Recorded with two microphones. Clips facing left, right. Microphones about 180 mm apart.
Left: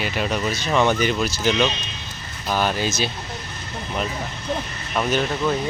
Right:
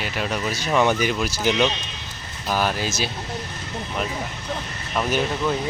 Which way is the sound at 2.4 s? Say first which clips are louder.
Left 1 dB; 5° right (ahead or behind).